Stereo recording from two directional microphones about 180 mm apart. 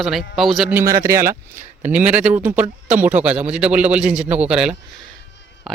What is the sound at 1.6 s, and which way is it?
Speech, 45° right (ahead or behind).